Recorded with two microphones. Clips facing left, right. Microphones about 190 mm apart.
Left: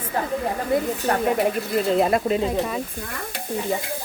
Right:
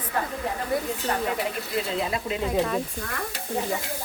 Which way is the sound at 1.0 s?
50° left (ahead or behind).